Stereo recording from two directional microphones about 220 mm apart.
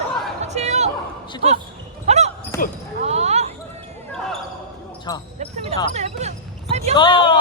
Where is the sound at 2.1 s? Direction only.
30° right (ahead or behind).